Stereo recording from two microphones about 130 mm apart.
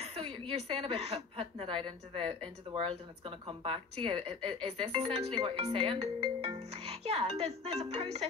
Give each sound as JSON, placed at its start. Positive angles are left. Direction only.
{"t": 0.0, "sound": "a woman's voice", "side_deg": -50}